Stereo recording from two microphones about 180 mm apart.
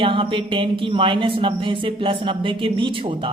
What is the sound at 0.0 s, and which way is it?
Speech, 30° right (ahead or behind).